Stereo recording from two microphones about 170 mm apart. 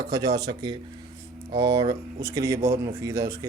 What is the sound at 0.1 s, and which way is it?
Speech, 20° right (ahead or behind).